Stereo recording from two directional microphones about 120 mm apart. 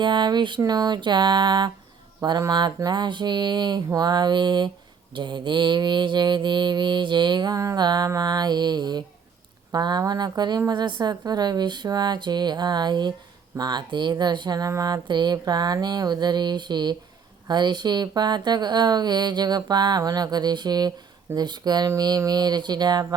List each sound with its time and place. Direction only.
0.0 s mantra: 40° right (ahead or behind)